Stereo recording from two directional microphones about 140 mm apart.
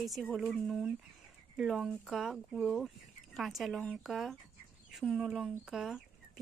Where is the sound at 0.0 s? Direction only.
5° left (ahead or behind).